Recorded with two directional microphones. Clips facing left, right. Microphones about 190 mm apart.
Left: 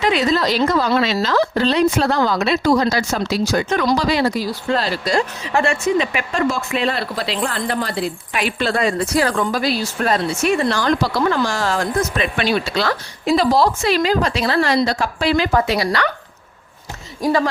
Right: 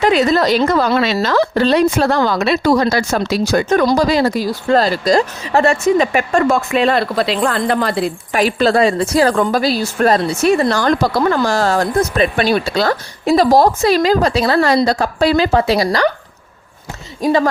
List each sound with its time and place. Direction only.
0.0 s a woman's voice: 50° right (ahead or behind)
2.1 s speech: 70° right (ahead or behind); by 9.3 s 30° right (ahead or behind)
9.3 s speech: 50° right (ahead or behind)
17.2 s speech: 20° right (ahead or behind)